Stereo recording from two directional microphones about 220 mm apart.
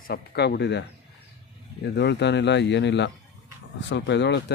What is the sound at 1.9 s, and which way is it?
Speech, 50° left (ahead or behind).